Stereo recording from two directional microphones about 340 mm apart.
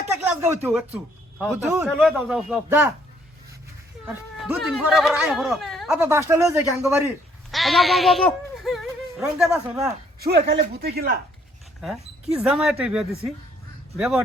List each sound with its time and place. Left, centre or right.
0.3 s speech: centre
4.0 s speech: centre
10.2 s speech: right
12.3 s speech: centre